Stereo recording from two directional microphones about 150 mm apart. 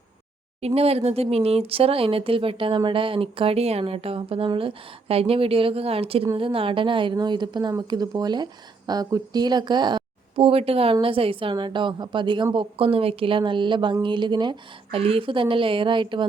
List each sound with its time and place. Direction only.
0.6 s a woman's voice: 40° right (ahead or behind)